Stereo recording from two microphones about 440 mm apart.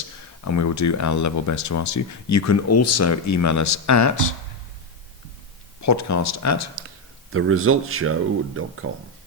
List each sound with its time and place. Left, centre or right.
0.4 s speech: left
5.8 s speech: left
7.3 s speech: right